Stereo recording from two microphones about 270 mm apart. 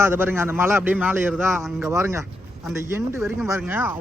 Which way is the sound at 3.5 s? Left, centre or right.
Centre.